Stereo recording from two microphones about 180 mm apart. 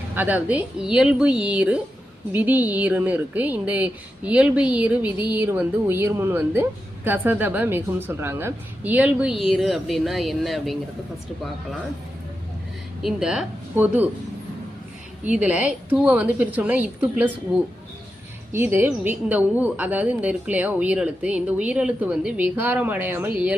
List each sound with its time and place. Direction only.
0.1 s a woman's voice: 10° right (ahead or behind)
13.0 s a woman's voice: centre (ahead or behind)
15.2 s a woman's voice: 10° right (ahead or behind)
18.5 s a woman's voice: 10° right (ahead or behind)